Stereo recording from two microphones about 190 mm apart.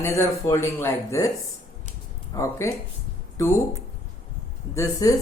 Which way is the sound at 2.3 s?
15° left (ahead or behind).